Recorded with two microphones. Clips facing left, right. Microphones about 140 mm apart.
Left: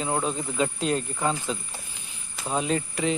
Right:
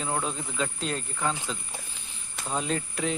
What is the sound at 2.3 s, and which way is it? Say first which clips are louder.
Speech: left 4 dB; 5° left (ahead or behind).